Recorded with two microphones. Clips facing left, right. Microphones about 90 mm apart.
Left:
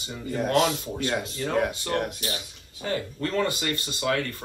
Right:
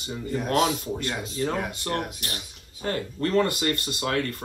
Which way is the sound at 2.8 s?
45° right (ahead or behind).